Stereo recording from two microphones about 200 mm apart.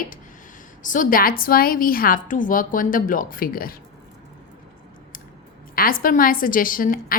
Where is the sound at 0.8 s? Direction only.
40° left (ahead or behind).